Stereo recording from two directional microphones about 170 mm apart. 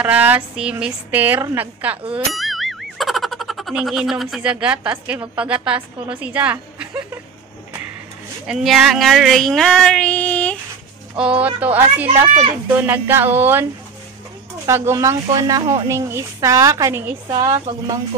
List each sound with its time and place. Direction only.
0.0 s a woman's voice: 10° right (ahead or behind)
2.1 s boing: centre (ahead or behind)
5.7 s a woman's voice: 5° right (ahead or behind)
8.5 s speech: 5° right (ahead or behind)
11.1 s a woman's voice: 5° right (ahead or behind)
14.7 s speech: 15° right (ahead or behind)